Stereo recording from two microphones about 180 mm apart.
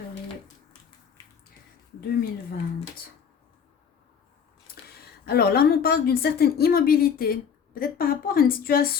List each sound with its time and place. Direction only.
2.0 s a woman's voice: 60° left (ahead or behind)
5.2 s a woman's voice: 60° left (ahead or behind)